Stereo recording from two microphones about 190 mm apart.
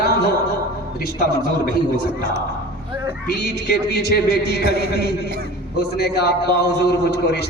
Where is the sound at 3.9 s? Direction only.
55° left (ahead or behind).